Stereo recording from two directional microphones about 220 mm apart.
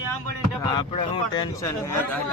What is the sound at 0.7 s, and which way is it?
Speech, 20° left (ahead or behind).